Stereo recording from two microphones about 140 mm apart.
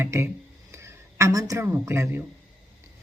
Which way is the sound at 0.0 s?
20° right (ahead or behind).